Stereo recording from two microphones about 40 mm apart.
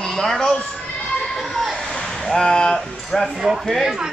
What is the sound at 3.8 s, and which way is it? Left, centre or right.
Speech, centre.